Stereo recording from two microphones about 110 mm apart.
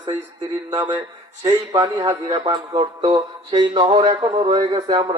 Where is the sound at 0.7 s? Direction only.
45° right (ahead or behind).